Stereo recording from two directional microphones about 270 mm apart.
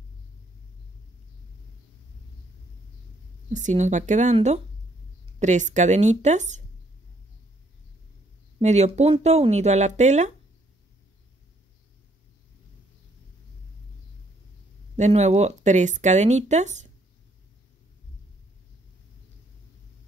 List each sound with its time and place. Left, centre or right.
3.4 s speech: right
8.5 s speech: right
15.0 s speech: right